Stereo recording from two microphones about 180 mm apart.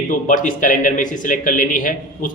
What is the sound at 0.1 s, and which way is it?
A man's voice, 45° left (ahead or behind).